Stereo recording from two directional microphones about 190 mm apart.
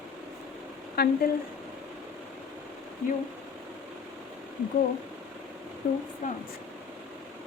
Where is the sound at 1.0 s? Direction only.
55° left (ahead or behind).